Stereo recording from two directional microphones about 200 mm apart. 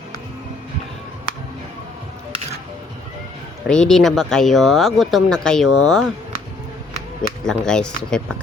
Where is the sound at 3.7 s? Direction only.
5° left (ahead or behind).